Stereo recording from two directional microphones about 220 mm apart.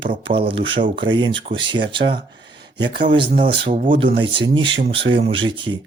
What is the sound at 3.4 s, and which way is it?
Speech, 30° right (ahead or behind).